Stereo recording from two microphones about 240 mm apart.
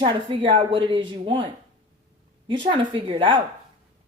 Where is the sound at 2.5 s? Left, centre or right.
Centre.